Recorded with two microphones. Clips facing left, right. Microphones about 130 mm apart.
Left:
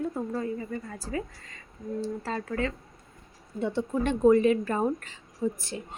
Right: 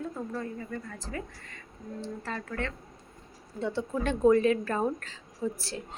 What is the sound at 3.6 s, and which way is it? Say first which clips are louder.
Speech: left 3 dB; 20° left (ahead or behind).